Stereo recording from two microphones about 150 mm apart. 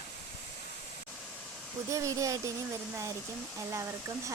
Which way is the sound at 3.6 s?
20° right (ahead or behind).